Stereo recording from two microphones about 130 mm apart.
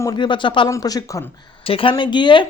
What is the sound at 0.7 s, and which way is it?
Speech, 30° left (ahead or behind).